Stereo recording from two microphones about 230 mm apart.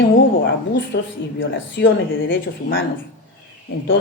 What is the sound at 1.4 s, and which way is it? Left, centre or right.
Speech, left.